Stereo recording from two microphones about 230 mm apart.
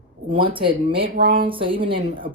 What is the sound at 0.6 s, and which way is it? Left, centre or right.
Speech, right.